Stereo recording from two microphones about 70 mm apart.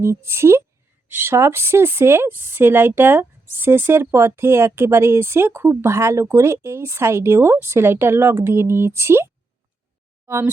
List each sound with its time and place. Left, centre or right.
0.0 s a woman's voice: right